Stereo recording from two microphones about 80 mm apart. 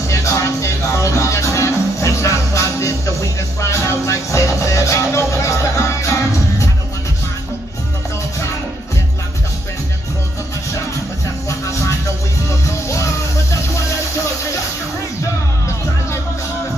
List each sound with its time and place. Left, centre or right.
0.1 s music: left
12.4 s music: left